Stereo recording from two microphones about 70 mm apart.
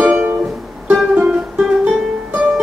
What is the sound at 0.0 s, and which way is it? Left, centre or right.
Music, right.